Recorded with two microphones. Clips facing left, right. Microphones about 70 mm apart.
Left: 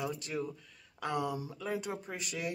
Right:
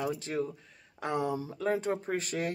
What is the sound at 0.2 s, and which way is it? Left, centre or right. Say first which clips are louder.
Speech: right 4 dB; right.